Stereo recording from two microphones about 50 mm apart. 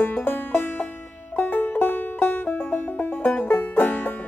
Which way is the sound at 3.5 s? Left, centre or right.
Left.